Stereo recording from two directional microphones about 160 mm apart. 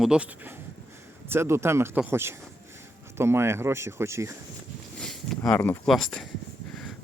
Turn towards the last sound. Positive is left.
turn(degrees=5)  # may be behind; listen again after turning